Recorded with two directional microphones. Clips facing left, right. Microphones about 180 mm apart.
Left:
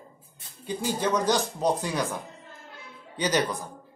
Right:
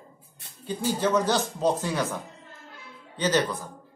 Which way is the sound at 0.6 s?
15° left (ahead or behind).